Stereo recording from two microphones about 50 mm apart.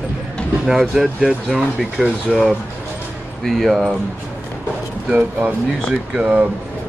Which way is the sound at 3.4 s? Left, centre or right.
Centre.